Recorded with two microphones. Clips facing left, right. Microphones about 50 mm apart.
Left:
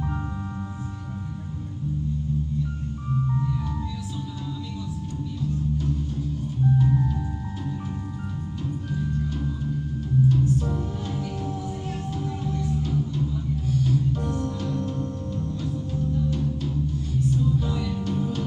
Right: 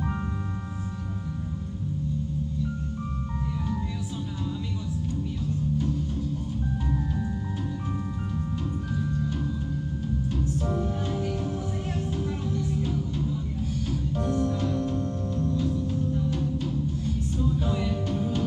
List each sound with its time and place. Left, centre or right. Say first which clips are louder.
10.6 s music: right 1 dB; centre
14.3 s music: right 2 dB; centre
17.6 s music: even; right
17.9 s music: left 1 dB; centre